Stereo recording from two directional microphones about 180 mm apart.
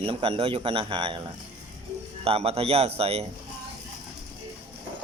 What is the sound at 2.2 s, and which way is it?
Speech, 30° right (ahead or behind).